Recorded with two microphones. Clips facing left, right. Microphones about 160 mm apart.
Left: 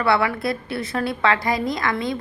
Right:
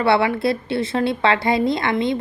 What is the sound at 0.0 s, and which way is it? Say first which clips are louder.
A woman's voice: right 3 dB; 25° right (ahead or behind).